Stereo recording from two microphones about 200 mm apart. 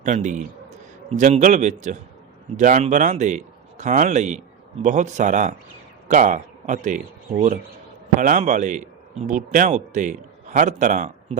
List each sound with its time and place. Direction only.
0.0 s a man's voice: 35° right (ahead or behind)